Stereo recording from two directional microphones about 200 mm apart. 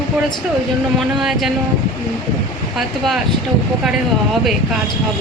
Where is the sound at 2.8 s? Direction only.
Centre (ahead or behind).